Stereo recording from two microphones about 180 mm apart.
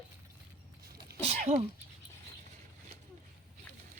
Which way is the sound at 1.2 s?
35° right (ahead or behind).